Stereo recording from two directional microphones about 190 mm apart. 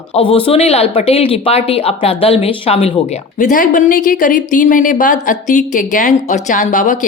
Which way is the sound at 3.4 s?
40° left (ahead or behind).